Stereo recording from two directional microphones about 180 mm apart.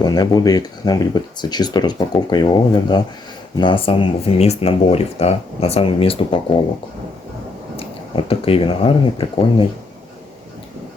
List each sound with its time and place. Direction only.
0.0 s speech: 20° left (ahead or behind)
7.8 s speech: 30° left (ahead or behind)